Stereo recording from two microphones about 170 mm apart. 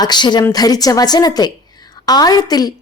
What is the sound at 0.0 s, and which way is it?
A woman's voice, 25° left (ahead or behind).